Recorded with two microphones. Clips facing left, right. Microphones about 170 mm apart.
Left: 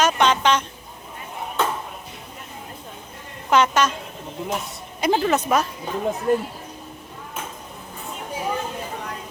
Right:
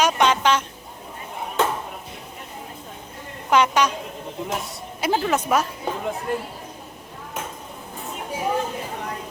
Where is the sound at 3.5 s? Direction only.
10° right (ahead or behind).